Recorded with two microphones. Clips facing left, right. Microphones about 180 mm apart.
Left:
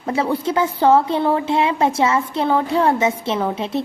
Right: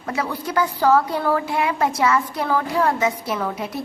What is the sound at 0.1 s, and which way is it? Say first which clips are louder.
A woman's voice: left 5 dB; 25° left (ahead or behind).